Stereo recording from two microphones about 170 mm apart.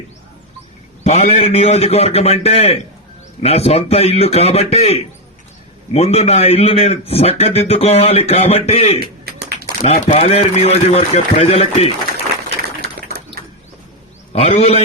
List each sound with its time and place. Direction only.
1.0 s a man's voice: 40° left (ahead or behind)
9.2 s a sound: 65° right (ahead or behind)
9.8 s a man's voice: 40° left (ahead or behind)
14.3 s a man's voice: 35° left (ahead or behind)